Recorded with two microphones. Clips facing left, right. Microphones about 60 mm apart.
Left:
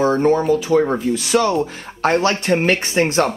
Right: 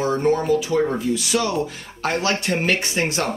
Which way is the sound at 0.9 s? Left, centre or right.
Left.